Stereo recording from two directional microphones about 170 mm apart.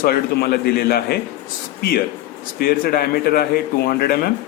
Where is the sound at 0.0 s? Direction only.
65° left (ahead or behind).